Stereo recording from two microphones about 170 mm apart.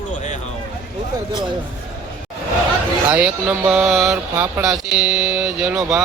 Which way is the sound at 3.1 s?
5° right (ahead or behind).